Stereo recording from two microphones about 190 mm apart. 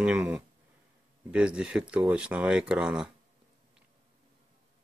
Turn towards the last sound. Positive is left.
turn(degrees=-5)  # may be behind; listen again after turning